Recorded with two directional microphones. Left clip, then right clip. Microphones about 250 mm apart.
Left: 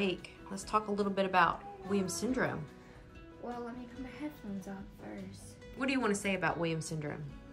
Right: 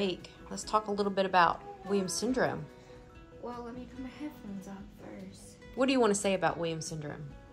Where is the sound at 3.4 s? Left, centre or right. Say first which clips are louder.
Right 1 dB; centre.